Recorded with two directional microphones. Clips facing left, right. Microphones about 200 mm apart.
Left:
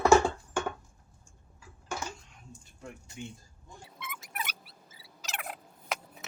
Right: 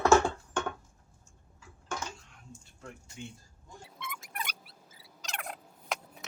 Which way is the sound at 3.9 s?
5° left (ahead or behind).